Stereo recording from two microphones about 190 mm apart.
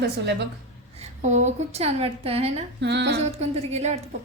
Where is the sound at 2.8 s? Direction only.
60° right (ahead or behind).